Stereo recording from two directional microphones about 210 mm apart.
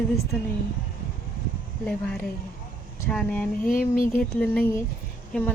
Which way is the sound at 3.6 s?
40° left (ahead or behind).